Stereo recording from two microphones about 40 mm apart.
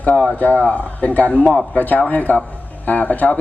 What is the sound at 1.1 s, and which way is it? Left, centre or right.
A man's voice, left.